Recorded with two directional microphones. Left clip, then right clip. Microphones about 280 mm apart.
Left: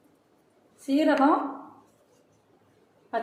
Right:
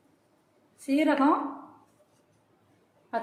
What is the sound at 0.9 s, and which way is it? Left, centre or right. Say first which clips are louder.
Speech: left 2 dB; right.